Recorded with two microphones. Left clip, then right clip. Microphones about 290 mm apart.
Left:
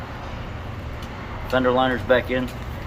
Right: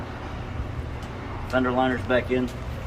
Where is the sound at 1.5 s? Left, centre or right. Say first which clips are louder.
Left 4 dB; left.